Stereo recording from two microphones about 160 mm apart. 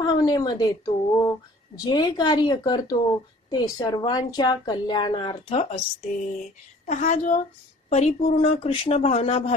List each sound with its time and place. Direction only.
0.0 s a woman's voice: 25° left (ahead or behind); by 5.8 s 40° left (ahead or behind)
6.9 s a woman's voice: 50° left (ahead or behind)